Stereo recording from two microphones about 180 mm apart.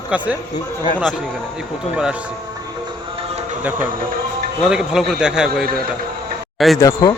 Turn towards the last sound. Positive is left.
turn(degrees=15)  # may be behind; listen again after turning